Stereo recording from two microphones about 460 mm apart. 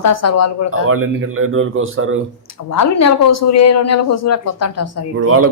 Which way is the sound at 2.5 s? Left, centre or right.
Left.